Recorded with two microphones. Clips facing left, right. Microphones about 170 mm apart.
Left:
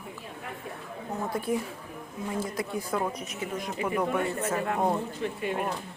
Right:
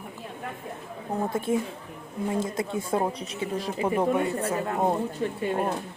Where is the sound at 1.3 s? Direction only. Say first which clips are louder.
Right 1 dB; 25° right (ahead or behind).